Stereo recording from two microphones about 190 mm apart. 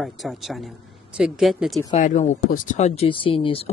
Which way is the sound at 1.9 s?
40° left (ahead or behind).